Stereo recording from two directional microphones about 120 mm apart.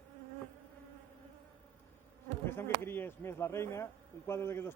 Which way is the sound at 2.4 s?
20° left (ahead or behind).